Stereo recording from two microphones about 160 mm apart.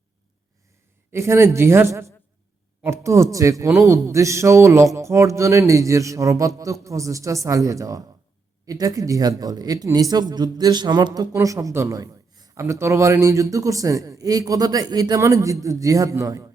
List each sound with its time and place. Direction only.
1.1 s a man's voice: 15° right (ahead or behind)